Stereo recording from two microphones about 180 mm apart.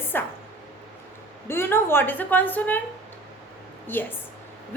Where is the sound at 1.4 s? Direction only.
15° left (ahead or behind).